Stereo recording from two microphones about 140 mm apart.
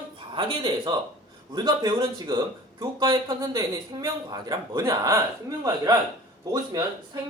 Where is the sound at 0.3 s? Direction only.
35° right (ahead or behind).